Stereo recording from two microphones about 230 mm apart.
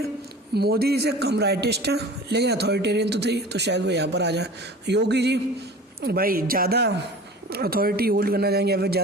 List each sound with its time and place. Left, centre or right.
0.5 s a man's voice: right